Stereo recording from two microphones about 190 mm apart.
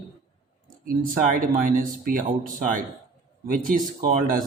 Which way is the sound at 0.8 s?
50° right (ahead or behind).